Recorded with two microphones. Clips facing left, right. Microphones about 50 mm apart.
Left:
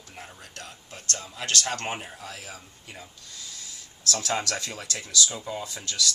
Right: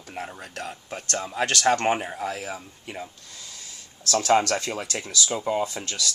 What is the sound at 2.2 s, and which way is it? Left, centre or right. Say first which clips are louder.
Speech: right 9 dB; right.